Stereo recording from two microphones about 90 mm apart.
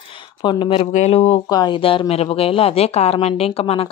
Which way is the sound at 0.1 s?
65° left (ahead or behind).